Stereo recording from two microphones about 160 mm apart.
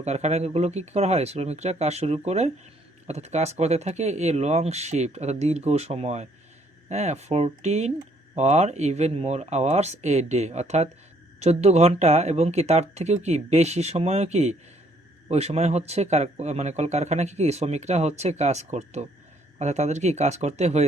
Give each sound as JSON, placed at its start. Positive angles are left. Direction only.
{"t": 0.0, "sound": "speech", "side_deg": -45}